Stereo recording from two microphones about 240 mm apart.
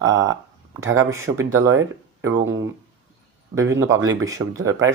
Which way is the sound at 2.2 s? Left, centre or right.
Right.